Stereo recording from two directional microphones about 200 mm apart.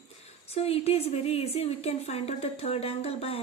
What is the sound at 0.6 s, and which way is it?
A woman's voice, 30° left (ahead or behind).